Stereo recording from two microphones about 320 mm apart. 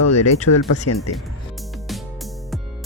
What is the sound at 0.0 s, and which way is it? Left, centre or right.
Speech, left.